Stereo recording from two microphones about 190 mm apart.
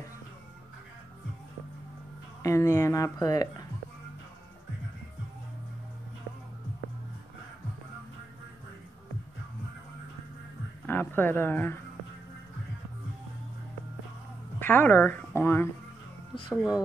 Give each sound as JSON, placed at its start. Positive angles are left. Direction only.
{"t": 2.4, "sound": "speech", "side_deg": 15}
{"t": 10.9, "sound": "a man's voice", "side_deg": 10}
{"t": 14.6, "sound": "a woman's voice", "side_deg": 10}
{"t": 16.5, "sound": "speech", "side_deg": -5}